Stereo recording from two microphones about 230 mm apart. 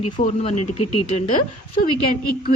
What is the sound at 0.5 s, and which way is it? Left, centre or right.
Speech, left.